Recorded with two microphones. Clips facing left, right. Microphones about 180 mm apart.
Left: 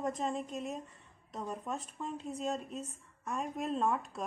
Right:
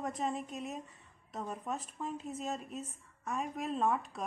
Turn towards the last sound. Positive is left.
turn(degrees=0)  # may be behind; listen again after turning